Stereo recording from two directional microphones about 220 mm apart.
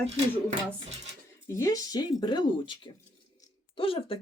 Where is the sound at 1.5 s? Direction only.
15° left (ahead or behind).